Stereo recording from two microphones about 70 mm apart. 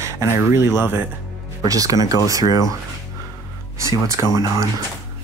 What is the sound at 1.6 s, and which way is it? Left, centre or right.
Speech, right.